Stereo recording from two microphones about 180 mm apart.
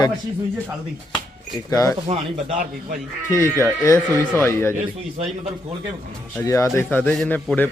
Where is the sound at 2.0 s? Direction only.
35° right (ahead or behind).